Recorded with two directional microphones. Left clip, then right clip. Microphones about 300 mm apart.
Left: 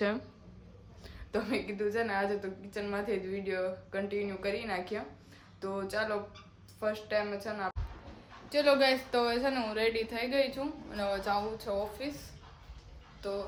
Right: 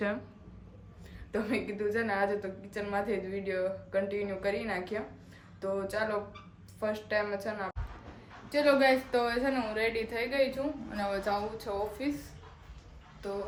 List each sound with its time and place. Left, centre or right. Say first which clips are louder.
1.3 s a woman's voice: right 1 dB; centre